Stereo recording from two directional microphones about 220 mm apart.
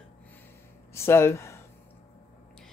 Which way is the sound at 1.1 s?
10° left (ahead or behind).